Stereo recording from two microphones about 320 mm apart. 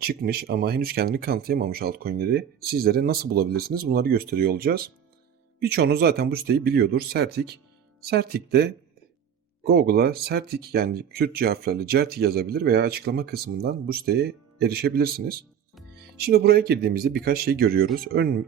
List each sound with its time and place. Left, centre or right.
0.0 s speech: right